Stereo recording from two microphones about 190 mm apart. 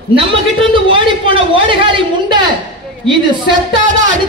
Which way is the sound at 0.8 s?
25° right (ahead or behind).